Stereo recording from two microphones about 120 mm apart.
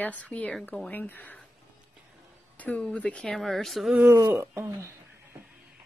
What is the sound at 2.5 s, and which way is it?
A woman's voice, 10° left (ahead or behind).